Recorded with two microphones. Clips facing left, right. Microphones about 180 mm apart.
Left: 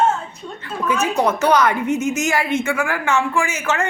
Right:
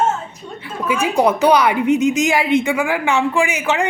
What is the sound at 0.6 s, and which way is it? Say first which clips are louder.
A woman's voice: right 1 dB; 10° right (ahead or behind).